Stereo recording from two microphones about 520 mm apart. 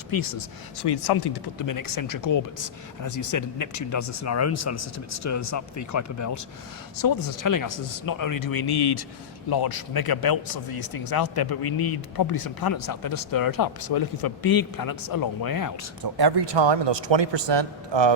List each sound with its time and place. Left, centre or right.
0.1 s speech: left
16.0 s a man's voice: right